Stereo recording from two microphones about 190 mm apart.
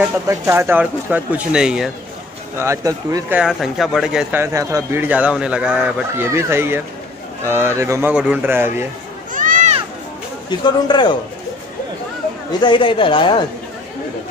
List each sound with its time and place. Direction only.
0.0 s speech: 15° right (ahead or behind)
2.5 s speech: 15° right (ahead or behind)
3.3 s speech: centre (ahead or behind)
9.3 s a sound: 45° right (ahead or behind)
10.6 s speech: 25° left (ahead or behind)
12.5 s speech: 25° left (ahead or behind)